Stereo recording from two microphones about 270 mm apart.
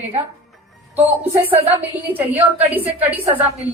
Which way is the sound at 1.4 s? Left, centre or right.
Centre.